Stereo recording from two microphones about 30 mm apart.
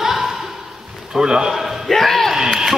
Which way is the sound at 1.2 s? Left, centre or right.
Right.